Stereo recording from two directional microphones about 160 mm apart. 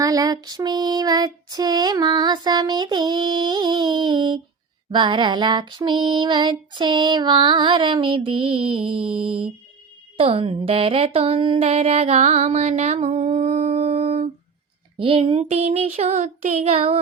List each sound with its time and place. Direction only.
0.0 s female singing: 20° right (ahead or behind)
10.2 s speech: 35° right (ahead or behind)
14.9 s a sound: 35° right (ahead or behind)